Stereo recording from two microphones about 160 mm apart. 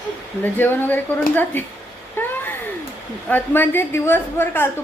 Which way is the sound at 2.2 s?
10° left (ahead or behind).